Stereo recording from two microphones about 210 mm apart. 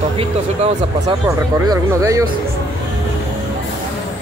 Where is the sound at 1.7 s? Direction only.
15° right (ahead or behind).